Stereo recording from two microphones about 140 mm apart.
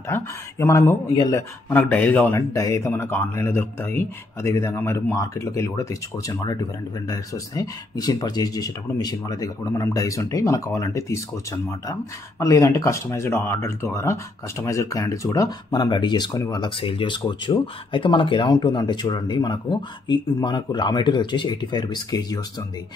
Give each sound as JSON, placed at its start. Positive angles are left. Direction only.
{"t": 0.1, "sound": "speech", "side_deg": 20}
{"t": 2.5, "sound": "speech", "side_deg": 20}